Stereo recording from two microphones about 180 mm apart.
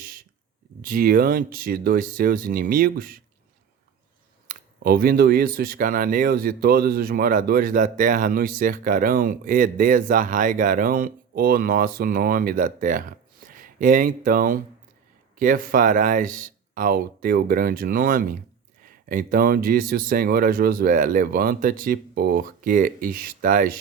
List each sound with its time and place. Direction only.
0.0 s a sound: 55° right (ahead or behind)
0.8 s speech: 50° right (ahead or behind)
4.4 s speech: 55° right (ahead or behind)